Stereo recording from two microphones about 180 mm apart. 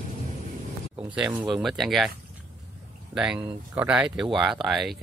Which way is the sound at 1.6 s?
Centre (ahead or behind).